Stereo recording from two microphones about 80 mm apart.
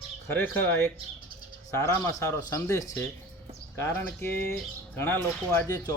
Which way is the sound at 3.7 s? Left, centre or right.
Left.